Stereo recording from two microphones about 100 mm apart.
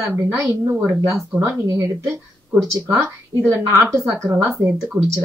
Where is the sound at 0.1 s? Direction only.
25° right (ahead or behind).